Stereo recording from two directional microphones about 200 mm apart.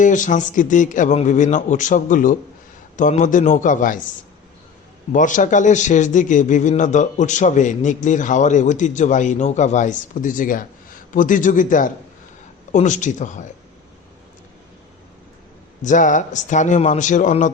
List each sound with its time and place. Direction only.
0.0 s speech: 40° left (ahead or behind)
5.1 s speech: 40° left (ahead or behind)
15.8 s speech: 40° left (ahead or behind)